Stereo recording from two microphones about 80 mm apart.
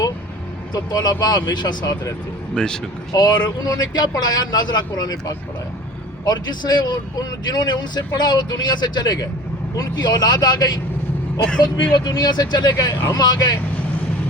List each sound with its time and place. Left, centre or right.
0.7 s speech: left
2.6 s speech: centre
3.1 s speech: left